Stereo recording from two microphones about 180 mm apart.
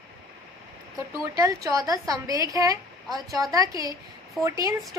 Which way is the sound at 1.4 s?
20° right (ahead or behind).